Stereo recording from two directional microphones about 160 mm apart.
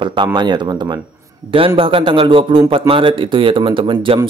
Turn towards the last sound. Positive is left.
turn(degrees=-35)  # may be behind; listen again after turning